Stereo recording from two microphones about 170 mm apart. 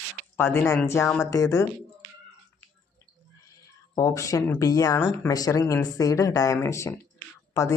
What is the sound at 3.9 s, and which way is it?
Speech, 20° left (ahead or behind).